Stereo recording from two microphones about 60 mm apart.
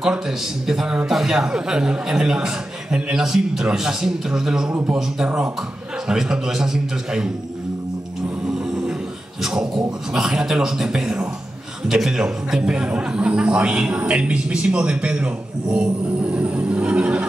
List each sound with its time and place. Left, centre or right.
0.7 s a man's voice: centre
8.5 s snoring: centre
9.4 s a man's voice: centre